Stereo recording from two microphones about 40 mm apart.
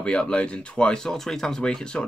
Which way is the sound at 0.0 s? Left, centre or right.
Left.